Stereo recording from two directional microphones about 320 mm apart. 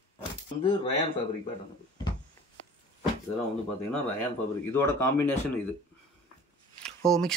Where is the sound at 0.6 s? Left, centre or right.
Centre.